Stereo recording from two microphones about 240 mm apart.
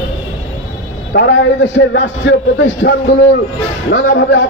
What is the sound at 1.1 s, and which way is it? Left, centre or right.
A man's voice, left.